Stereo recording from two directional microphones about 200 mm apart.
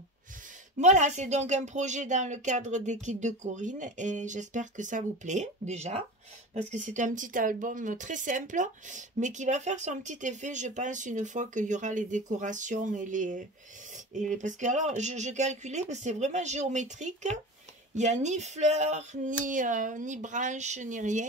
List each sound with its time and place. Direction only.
0.7 s speech: 35° right (ahead or behind)